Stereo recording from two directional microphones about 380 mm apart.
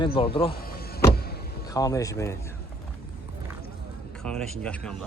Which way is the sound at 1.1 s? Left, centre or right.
Left.